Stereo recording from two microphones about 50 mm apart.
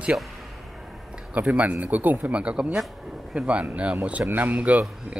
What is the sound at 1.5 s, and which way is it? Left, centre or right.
Speech, right.